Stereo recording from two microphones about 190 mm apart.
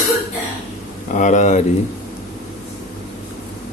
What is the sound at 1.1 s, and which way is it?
Speech, 40° left (ahead or behind).